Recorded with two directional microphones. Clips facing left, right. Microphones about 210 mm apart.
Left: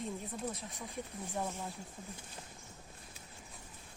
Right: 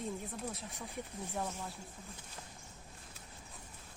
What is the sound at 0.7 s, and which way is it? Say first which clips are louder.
Speech: even; 10° left (ahead or behind).